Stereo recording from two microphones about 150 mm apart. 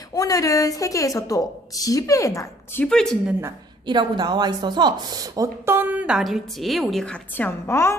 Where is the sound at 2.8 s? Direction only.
5° left (ahead or behind).